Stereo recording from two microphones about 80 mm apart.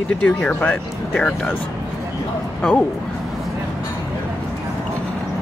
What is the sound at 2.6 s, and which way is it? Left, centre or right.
Speech, centre.